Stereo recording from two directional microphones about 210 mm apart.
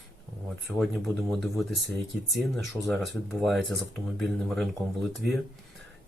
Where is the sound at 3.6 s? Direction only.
55° right (ahead or behind).